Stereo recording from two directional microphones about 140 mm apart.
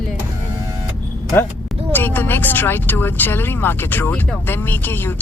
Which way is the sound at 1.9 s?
15° left (ahead or behind).